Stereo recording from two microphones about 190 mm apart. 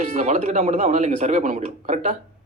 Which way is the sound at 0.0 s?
40° right (ahead or behind).